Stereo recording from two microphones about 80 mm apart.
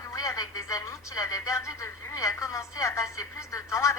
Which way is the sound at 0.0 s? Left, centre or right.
Left.